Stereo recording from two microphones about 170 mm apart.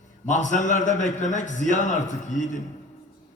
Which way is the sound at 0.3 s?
45° left (ahead or behind).